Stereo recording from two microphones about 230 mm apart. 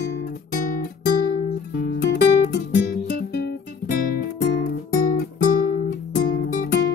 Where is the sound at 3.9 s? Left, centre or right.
Left.